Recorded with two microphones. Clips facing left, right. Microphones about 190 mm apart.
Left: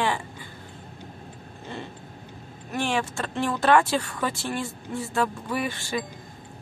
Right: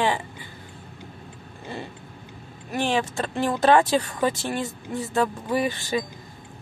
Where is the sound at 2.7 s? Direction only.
20° right (ahead or behind).